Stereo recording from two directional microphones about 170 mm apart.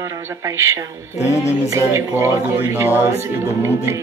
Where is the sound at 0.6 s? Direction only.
15° right (ahead or behind).